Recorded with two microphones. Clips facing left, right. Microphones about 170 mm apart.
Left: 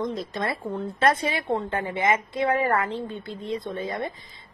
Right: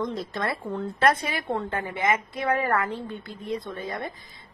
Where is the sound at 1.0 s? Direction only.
25° left (ahead or behind).